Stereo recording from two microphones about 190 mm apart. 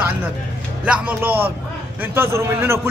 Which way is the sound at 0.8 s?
5° right (ahead or behind).